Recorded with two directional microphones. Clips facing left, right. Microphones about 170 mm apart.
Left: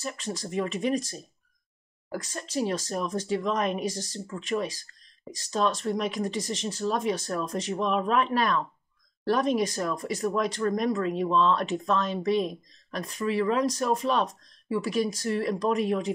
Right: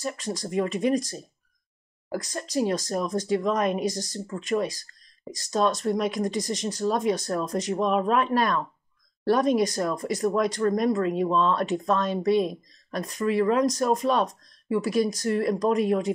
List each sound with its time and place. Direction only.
0.5 s speech: 40° right (ahead or behind)
2.0 s speech: 40° right (ahead or behind)